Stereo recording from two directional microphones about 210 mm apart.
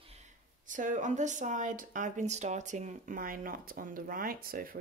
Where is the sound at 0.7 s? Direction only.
35° right (ahead or behind).